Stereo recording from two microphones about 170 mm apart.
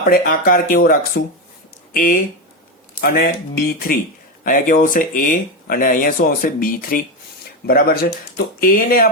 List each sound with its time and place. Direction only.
0.0 s speech: 55° left (ahead or behind)